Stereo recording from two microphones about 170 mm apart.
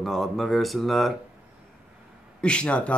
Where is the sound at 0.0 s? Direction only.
Centre (ahead or behind).